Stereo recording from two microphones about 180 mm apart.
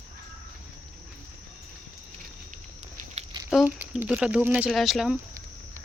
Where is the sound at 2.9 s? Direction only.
40° right (ahead or behind).